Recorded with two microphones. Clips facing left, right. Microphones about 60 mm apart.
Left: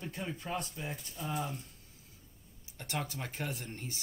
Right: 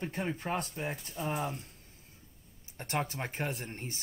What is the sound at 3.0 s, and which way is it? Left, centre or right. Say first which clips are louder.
Speech: right 4 dB; right.